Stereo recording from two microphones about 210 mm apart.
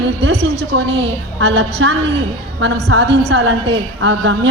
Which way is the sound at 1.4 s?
60° right (ahead or behind).